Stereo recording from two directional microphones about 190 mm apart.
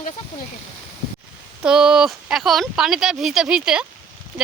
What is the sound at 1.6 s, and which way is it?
Speech, 5° right (ahead or behind).